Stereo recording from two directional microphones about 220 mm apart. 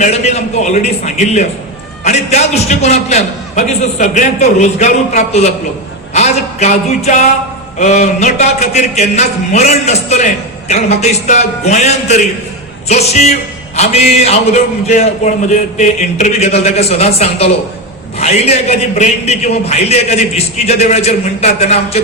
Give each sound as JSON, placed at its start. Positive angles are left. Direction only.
{"t": 0.0, "sound": "a man's voice", "side_deg": 30}